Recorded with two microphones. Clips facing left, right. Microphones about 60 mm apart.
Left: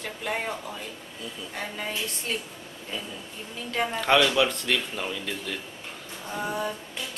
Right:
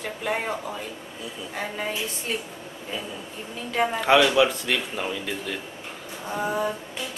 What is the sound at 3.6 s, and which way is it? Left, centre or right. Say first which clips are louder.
A woman's voice: right 3 dB; centre.